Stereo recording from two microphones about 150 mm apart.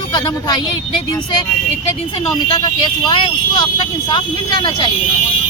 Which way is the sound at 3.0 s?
30° left (ahead or behind).